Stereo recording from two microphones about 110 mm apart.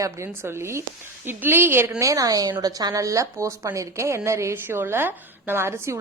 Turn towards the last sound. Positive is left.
turn(degrees=-25)  # may be behind; listen again after turning